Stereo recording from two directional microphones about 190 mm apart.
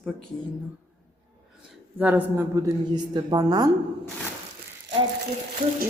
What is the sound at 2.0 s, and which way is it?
A woman's voice, 10° right (ahead or behind).